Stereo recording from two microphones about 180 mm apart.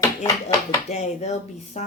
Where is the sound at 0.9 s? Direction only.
40° left (ahead or behind).